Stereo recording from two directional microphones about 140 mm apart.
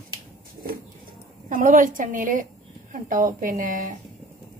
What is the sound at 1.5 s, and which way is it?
A woman's voice, 70° right (ahead or behind).